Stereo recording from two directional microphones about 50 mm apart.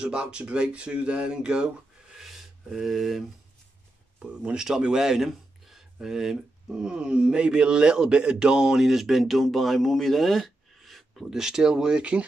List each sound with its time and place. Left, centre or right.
0.0 s speech: right; by 3.3 s centre
4.2 s speech: right